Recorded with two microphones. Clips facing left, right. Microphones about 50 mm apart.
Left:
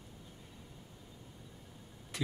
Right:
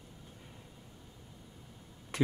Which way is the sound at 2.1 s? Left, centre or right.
Right.